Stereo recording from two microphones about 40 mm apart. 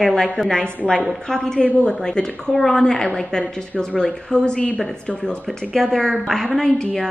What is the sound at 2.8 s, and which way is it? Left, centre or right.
A woman's voice, centre.